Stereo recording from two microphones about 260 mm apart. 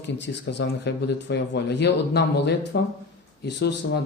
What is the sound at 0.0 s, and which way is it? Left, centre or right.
Speech, left.